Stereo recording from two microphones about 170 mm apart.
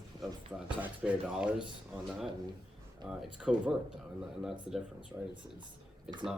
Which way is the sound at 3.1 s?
5° right (ahead or behind).